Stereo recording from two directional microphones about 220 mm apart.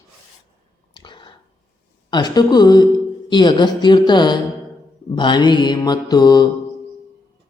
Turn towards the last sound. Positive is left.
turn(degrees=15)  # may be behind; listen again after turning